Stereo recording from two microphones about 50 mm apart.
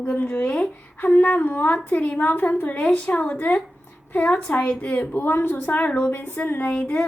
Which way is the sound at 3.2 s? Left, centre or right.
Left.